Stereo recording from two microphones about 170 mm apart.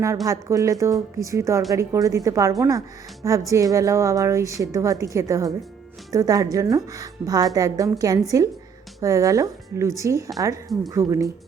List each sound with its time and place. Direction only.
0.3 s a woman's voice: 20° right (ahead or behind)